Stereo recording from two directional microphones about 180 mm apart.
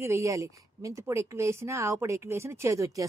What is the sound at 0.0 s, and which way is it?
A woman's voice, 15° right (ahead or behind).